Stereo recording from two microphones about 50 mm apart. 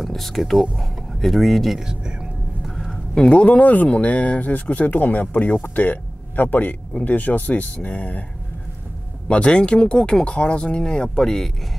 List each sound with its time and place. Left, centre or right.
0.0 s speech: centre
2.6 s a sound: centre
3.3 s speech: left
9.3 s speech: left